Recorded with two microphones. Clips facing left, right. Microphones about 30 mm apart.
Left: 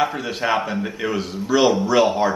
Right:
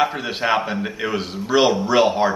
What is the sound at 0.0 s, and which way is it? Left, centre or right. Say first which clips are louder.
Speech: right 1 dB; centre.